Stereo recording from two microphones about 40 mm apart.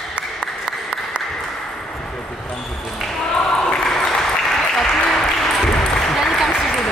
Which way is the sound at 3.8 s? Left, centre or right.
Centre.